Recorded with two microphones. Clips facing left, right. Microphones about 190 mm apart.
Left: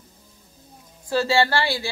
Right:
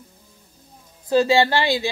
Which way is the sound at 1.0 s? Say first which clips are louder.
Right 4 dB; 15° right (ahead or behind).